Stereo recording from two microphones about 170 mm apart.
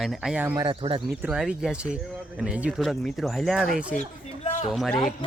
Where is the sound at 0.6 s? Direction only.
30° right (ahead or behind).